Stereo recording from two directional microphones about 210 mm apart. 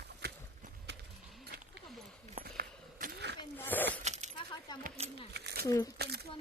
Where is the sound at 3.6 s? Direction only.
10° left (ahead or behind).